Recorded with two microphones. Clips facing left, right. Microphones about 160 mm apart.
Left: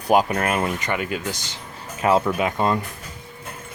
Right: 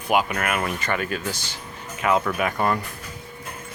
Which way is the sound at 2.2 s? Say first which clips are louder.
Left 2 dB; 20° left (ahead or behind).